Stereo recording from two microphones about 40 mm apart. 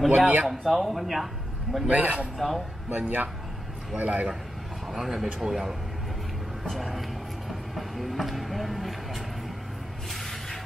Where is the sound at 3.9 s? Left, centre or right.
Right.